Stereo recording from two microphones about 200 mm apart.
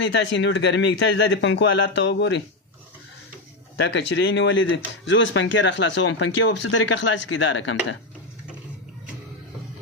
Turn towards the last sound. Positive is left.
turn(degrees=75)  # may be behind; listen again after turning